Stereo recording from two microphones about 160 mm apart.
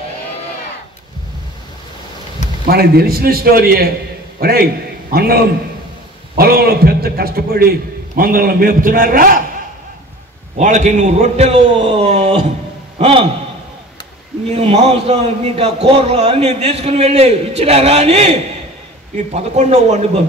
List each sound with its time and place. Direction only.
2.6 s a man's voice: 75° right (ahead or behind)
10.6 s a man's voice: 50° right (ahead or behind)
14.5 s a man's voice: 40° right (ahead or behind)